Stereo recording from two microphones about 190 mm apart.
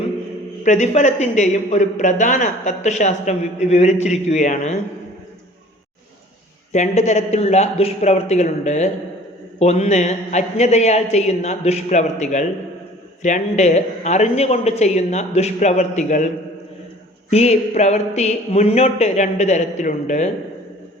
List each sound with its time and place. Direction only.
0.6 s speech: 40° left (ahead or behind)
6.7 s speech: 35° left (ahead or behind)
17.3 s speech: 35° left (ahead or behind)